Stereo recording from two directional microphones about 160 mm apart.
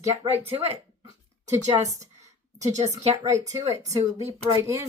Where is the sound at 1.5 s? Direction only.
20° right (ahead or behind).